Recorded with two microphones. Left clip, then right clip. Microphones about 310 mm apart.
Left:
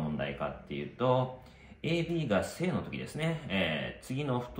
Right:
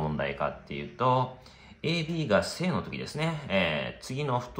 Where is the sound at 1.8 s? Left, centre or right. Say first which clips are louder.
Right 2 dB; right.